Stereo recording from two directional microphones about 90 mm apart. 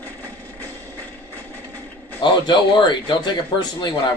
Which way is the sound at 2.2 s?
55° left (ahead or behind).